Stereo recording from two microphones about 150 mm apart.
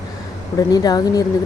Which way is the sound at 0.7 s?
25° left (ahead or behind).